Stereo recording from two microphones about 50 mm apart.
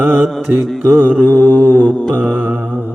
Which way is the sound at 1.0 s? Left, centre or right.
Left.